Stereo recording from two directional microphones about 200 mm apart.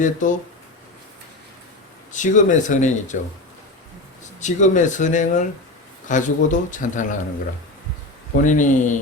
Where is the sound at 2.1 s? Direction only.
40° left (ahead or behind).